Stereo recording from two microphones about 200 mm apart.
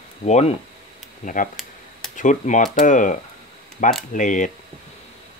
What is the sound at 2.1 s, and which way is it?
Speech, 40° left (ahead or behind).